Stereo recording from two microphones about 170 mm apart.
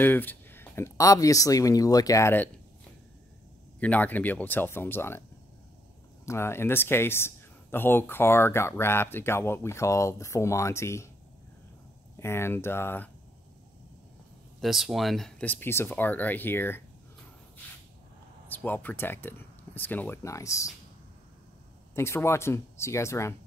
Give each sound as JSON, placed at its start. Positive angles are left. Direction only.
{"t": 0.0, "sound": "speech", "side_deg": 10}
{"t": 3.8, "sound": "speech", "side_deg": 10}
{"t": 6.2, "sound": "speech", "side_deg": 15}
{"t": 12.2, "sound": "speech", "side_deg": 15}
{"t": 14.6, "sound": "speech", "side_deg": 0}
{"t": 18.5, "sound": "speech", "side_deg": 10}
{"t": 21.9, "sound": "speech", "side_deg": 15}